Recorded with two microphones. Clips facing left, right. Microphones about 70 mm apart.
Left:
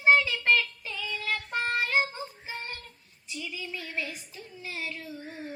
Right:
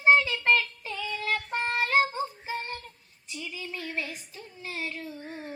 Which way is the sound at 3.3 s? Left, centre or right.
Right.